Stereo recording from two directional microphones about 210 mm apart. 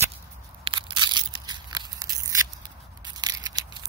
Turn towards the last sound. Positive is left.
turn(degrees=-20)  # may be behind; listen again after turning